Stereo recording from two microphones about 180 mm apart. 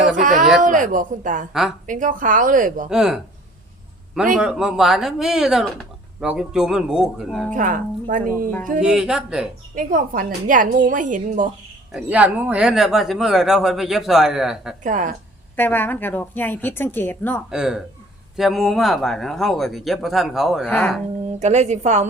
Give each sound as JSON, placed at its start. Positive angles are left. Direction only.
{"t": 0.2, "sound": "a woman's voice", "side_deg": -45}
{"t": 2.9, "sound": "speech", "side_deg": -5}
{"t": 4.4, "sound": "speech", "side_deg": -5}
{"t": 7.5, "sound": "a woman's voice", "side_deg": -45}
{"t": 8.8, "sound": "speech", "side_deg": -5}
{"t": 9.7, "sound": "a woman's voice", "side_deg": -50}
{"t": 11.9, "sound": "speech", "side_deg": -10}
{"t": 14.8, "sound": "a woman's voice", "side_deg": -45}
{"t": 15.5, "sound": "a woman's voice", "side_deg": 10}
{"t": 17.5, "sound": "speech", "side_deg": -5}
{"t": 20.7, "sound": "a woman's voice", "side_deg": 10}
{"t": 21.3, "sound": "a woman's voice", "side_deg": -40}